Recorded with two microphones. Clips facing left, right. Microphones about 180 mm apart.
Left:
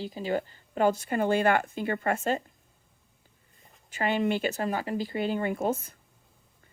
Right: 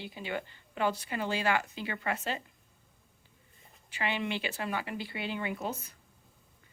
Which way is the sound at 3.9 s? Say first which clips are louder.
Left 7 dB; 45° left (ahead or behind).